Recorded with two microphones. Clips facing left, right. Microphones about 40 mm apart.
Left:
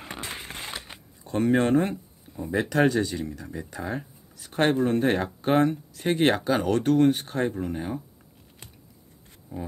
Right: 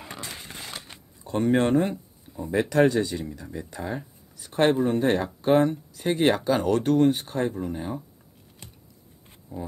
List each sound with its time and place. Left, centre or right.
0.1 s a sound: left
1.2 s speech: centre
9.5 s speech: left